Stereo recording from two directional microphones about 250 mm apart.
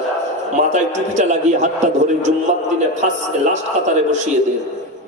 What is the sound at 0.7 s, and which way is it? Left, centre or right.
A man's voice, right.